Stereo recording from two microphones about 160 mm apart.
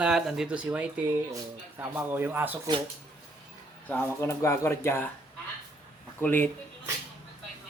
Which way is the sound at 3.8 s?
10° left (ahead or behind).